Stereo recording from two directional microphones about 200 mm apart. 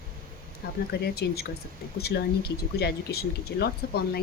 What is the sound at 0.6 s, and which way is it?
Speech, 55° left (ahead or behind).